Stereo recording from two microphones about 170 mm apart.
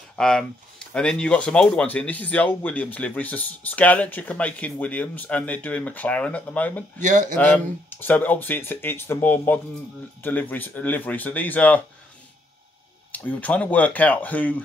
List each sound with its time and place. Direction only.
0.1 s speech: 5° left (ahead or behind)
7.0 s a man's voice: 45° right (ahead or behind)
7.3 s speech: 10° left (ahead or behind)
13.1 s speech: 10° left (ahead or behind)